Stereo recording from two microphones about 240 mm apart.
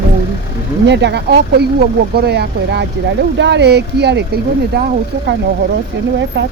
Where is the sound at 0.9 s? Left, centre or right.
Right.